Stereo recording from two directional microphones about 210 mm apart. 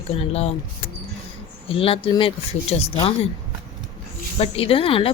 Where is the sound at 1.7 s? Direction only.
25° left (ahead or behind).